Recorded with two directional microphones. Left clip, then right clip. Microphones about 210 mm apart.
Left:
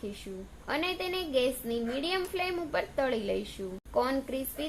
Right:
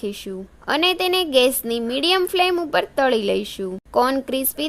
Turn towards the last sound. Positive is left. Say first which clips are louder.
# right 10 dB
turn(degrees=-50)  # may be behind; listen again after turning